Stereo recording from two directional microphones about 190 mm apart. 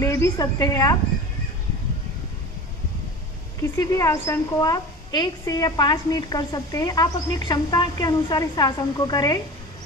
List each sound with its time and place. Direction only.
0.0 s a woman's voice: 15° left (ahead or behind)
3.7 s a woman's voice: 15° left (ahead or behind)